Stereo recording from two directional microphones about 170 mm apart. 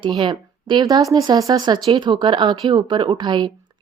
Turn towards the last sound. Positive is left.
turn(degrees=-25)  # may be behind; listen again after turning